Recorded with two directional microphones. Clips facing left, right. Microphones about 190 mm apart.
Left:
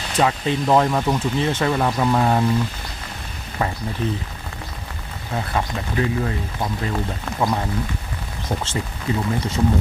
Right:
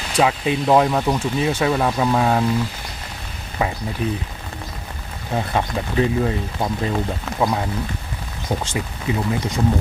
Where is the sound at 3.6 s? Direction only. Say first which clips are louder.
Right 1 dB; 10° right (ahead or behind).